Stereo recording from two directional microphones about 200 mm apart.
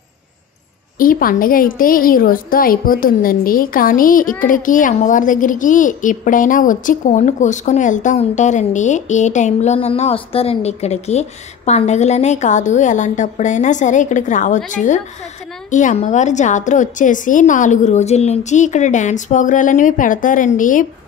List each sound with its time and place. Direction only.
0.9 s a woman's voice: 45° left (ahead or behind)